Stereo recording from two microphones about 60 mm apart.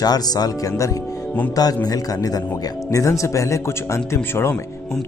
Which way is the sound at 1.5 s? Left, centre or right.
Left.